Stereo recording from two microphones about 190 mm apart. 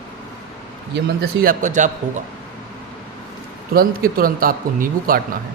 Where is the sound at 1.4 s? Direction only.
45° right (ahead or behind).